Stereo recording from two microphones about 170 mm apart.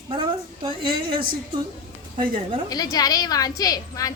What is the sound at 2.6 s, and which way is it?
A woman's voice, 20° left (ahead or behind).